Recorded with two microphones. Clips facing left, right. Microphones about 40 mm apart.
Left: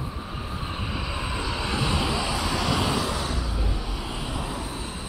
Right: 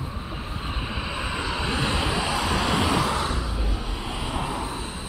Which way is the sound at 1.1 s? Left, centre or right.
Right.